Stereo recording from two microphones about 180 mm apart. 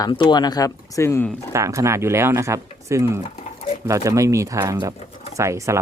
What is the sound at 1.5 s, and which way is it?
Speech, 15° right (ahead or behind).